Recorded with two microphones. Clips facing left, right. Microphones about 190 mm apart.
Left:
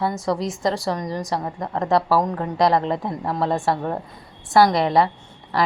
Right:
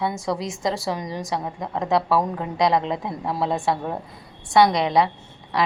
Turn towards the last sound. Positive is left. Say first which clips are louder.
# left 1 dB
turn(degrees=0)  # may be behind; listen again after turning